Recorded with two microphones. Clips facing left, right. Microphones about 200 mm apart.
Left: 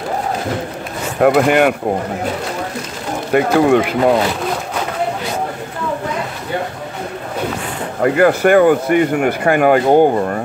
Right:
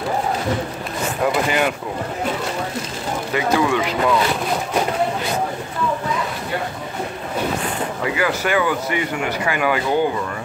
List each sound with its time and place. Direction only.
1.2 s speech: 60° left (ahead or behind)
3.3 s speech: 55° left (ahead or behind)
8.0 s speech: 50° left (ahead or behind)